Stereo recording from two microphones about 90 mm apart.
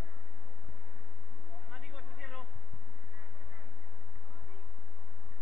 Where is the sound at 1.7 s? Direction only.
10° right (ahead or behind).